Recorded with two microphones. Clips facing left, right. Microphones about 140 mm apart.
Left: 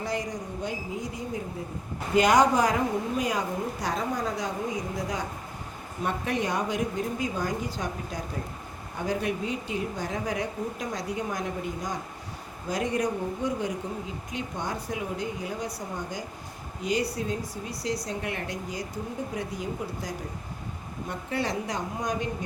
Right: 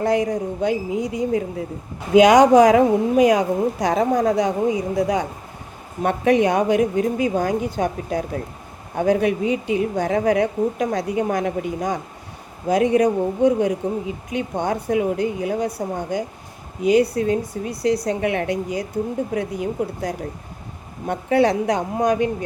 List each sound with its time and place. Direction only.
0.0 s a woman's voice: 60° right (ahead or behind)